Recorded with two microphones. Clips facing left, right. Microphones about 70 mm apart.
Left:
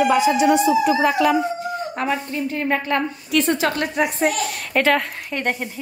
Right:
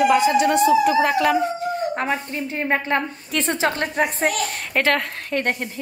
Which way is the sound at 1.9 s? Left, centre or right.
Right.